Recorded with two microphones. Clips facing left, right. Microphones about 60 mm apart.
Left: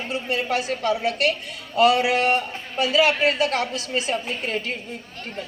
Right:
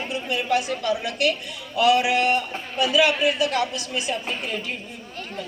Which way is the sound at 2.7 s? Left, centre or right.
Left.